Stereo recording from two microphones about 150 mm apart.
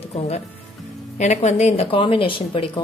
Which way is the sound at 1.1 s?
50° left (ahead or behind).